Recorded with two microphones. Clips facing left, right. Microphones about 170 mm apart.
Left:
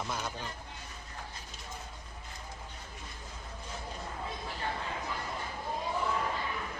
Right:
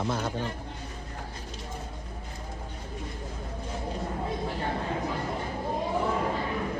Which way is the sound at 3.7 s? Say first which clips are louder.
Right 8 dB; 30° right (ahead or behind).